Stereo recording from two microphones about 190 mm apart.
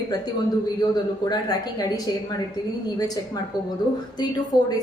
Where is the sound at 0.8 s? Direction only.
20° left (ahead or behind).